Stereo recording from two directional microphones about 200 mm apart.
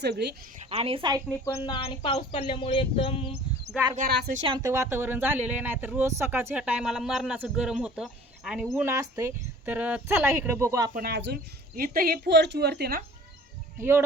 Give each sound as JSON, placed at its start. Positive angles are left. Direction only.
{"t": 0.0, "sound": "speech", "side_deg": -55}
{"t": 0.7, "sound": "a woman's voice", "side_deg": -30}
{"t": 1.9, "sound": "speech", "side_deg": 25}
{"t": 4.1, "sound": "a woman's voice", "side_deg": -55}
{"t": 4.4, "sound": "speech", "side_deg": -20}
{"t": 10.9, "sound": "a woman's voice", "side_deg": -55}
{"t": 13.7, "sound": "speech", "side_deg": -10}